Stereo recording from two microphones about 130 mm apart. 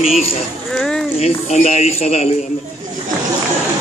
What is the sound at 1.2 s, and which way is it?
Speech, 60° left (ahead or behind).